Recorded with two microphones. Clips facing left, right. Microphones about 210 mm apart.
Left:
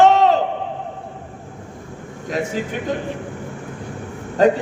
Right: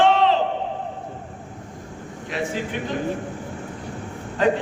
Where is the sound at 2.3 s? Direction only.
45° left (ahead or behind).